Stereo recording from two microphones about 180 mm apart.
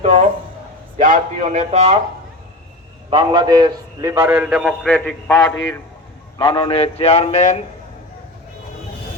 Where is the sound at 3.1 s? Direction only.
25° right (ahead or behind); by 5.3 s 10° left (ahead or behind).